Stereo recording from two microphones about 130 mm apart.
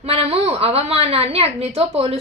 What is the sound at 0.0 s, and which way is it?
A woman's voice, 50° right (ahead or behind).